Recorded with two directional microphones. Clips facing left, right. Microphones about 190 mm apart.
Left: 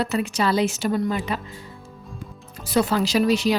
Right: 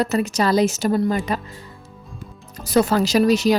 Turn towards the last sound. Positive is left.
turn(degrees=-40)  # may be behind; listen again after turning